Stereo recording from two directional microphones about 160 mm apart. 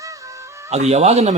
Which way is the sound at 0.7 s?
45° right (ahead or behind).